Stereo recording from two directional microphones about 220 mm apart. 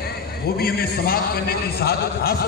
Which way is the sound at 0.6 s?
45° left (ahead or behind).